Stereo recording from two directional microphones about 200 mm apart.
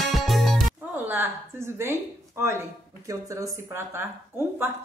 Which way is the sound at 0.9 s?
10° right (ahead or behind).